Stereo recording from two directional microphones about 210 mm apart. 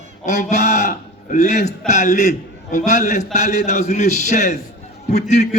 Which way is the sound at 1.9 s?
35° left (ahead or behind).